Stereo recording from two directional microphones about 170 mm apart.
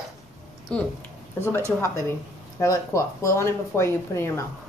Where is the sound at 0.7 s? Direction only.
5° left (ahead or behind).